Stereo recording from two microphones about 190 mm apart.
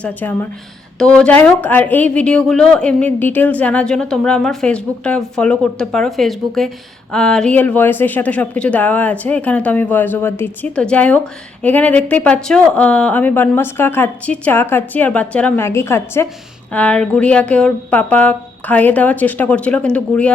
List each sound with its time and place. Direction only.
0.0 s a woman's voice: 10° left (ahead or behind)